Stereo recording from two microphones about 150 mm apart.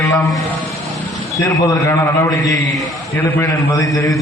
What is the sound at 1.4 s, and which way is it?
A man's voice, 20° left (ahead or behind).